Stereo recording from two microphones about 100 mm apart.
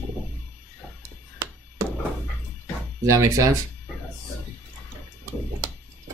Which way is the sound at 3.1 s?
30° right (ahead or behind).